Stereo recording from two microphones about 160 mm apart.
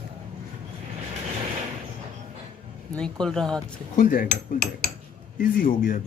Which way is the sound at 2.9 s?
5° left (ahead or behind).